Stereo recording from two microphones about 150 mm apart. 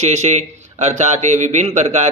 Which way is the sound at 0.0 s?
50° right (ahead or behind).